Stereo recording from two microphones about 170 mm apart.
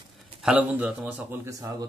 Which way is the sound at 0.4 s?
5° right (ahead or behind).